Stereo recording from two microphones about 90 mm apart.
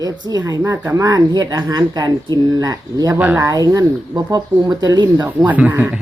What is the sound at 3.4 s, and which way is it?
Speech, 45° right (ahead or behind).